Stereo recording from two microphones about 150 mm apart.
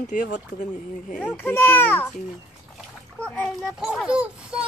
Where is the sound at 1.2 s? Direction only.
15° left (ahead or behind).